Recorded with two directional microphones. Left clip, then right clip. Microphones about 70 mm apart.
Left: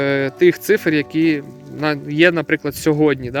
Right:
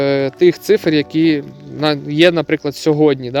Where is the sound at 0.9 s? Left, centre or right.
Right.